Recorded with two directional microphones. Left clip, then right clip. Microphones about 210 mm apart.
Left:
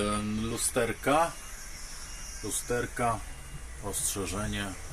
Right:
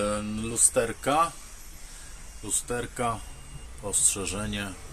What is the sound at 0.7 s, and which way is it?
Speech, 10° right (ahead or behind).